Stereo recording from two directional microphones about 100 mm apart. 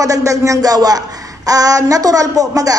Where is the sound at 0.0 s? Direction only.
35° right (ahead or behind).